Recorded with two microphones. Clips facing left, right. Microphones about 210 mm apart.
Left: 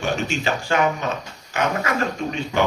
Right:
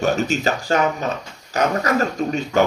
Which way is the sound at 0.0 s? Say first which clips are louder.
Right 4 dB; 40° right (ahead or behind).